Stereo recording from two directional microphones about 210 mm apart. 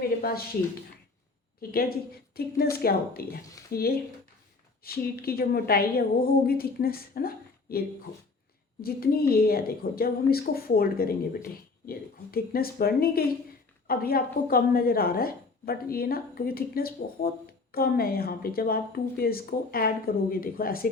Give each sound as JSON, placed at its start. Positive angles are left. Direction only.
{"t": 0.2, "sound": "speech", "side_deg": 45}
{"t": 1.7, "sound": "speech", "side_deg": 45}